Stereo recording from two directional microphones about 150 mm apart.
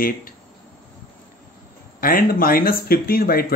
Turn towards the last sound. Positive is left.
turn(degrees=90)